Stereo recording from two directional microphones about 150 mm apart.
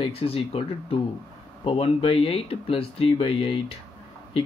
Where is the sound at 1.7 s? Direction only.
40° left (ahead or behind).